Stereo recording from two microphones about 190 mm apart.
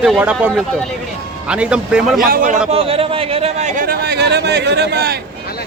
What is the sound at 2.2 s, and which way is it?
Speech, 50° right (ahead or behind).